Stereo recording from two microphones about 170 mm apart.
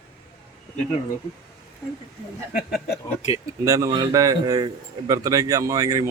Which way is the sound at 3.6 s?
20° right (ahead or behind).